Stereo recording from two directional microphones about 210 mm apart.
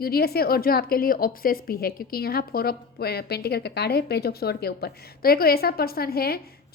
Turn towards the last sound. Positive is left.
turn(degrees=45)  # may be behind; listen again after turning